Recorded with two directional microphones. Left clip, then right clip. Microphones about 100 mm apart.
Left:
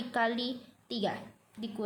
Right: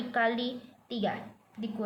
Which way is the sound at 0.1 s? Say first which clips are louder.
Right 2 dB; 55° left (ahead or behind).